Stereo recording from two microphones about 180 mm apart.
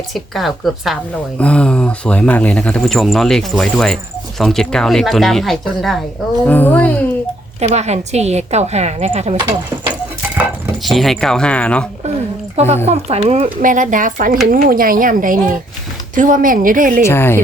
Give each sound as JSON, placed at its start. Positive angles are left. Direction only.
{"t": 0.1, "sound": "speech", "side_deg": 0}
{"t": 7.6, "sound": "speech", "side_deg": -40}
{"t": 10.8, "sound": "speech", "side_deg": 0}
{"t": 12.5, "sound": "speech", "side_deg": -35}
{"t": 17.1, "sound": "speech", "side_deg": 15}